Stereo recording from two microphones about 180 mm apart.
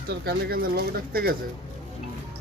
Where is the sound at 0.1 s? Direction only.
60° right (ahead or behind).